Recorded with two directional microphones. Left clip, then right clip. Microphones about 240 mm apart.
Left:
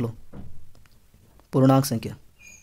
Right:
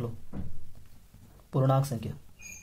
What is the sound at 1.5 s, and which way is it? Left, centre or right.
Speech, left.